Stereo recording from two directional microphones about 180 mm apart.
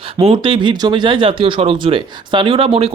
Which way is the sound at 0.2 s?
30° right (ahead or behind).